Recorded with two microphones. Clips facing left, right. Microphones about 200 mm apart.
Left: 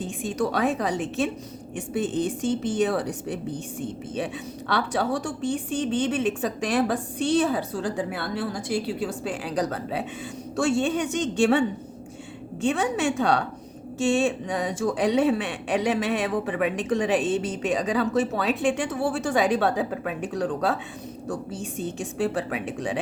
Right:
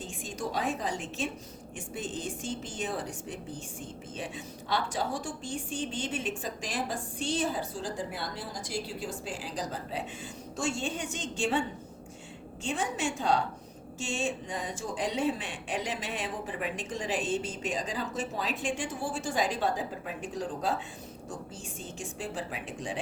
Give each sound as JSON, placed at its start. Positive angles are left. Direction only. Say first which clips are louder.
{"t": 0.3, "sound": "a woman's voice", "louder": "left 8 dB", "side_deg": 70}
{"t": 4.7, "sound": "speech", "louder": "left 6 dB", "side_deg": 65}
{"t": 12.6, "sound": "speech", "louder": "left 9 dB", "side_deg": 65}
{"t": 21.9, "sound": "speech", "louder": "left 10 dB", "side_deg": 65}